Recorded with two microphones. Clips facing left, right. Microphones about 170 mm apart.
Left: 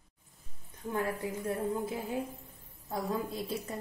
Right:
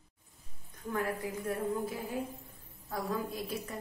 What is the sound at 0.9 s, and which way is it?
A woman's voice, 30° left (ahead or behind).